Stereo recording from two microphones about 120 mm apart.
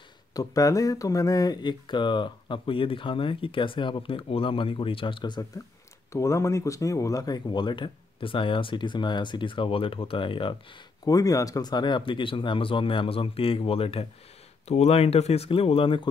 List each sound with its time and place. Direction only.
0.3 s speech: 30° left (ahead or behind)
6.1 s speech: 25° left (ahead or behind); by 10.5 s 45° left (ahead or behind)
11.1 s speech: 30° left (ahead or behind); by 16.1 s 45° left (ahead or behind)